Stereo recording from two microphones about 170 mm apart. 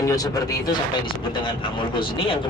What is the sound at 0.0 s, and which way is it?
A man's voice, 20° left (ahead or behind).